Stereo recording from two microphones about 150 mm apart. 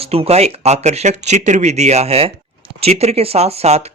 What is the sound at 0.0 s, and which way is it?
Speech, 40° right (ahead or behind).